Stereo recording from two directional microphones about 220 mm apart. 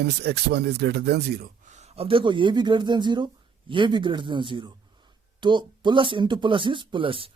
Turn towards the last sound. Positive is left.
turn(degrees=-25)  # may be behind; listen again after turning